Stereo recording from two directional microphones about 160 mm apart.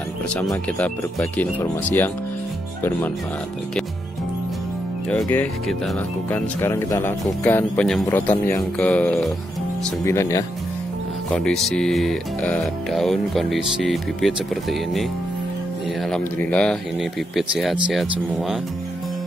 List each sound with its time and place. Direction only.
0.7 s speech: 10° left (ahead or behind)
5.1 s speech: 10° left (ahead or behind)
10.0 s speech: 20° left (ahead or behind)
11.2 s speech: 5° left (ahead or behind)
16.1 s speech: 10° left (ahead or behind)